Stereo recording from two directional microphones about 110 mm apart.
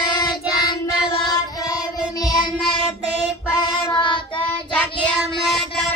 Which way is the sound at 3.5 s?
40° left (ahead or behind).